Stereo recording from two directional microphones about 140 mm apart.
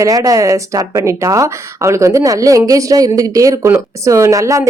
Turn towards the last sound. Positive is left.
turn(degrees=-20)  # may be behind; listen again after turning